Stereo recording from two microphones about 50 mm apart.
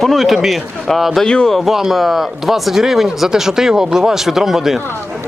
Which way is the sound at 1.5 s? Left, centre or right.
Centre.